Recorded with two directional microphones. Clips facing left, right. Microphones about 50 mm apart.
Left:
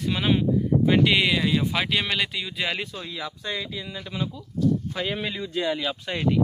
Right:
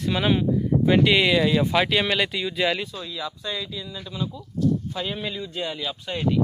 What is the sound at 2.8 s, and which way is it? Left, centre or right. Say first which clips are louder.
Speech: right 1 dB; left.